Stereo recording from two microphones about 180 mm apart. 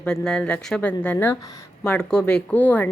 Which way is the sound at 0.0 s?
5° left (ahead or behind).